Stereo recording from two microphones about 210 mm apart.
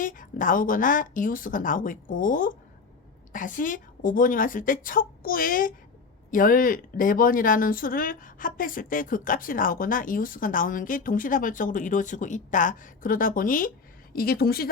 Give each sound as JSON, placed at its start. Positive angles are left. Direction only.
{"t": 0.0, "sound": "speech", "side_deg": 40}